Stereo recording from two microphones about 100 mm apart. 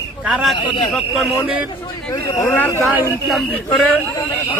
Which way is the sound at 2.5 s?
20° left (ahead or behind).